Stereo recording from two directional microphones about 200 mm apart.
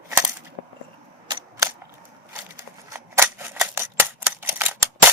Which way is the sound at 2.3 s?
10° right (ahead or behind).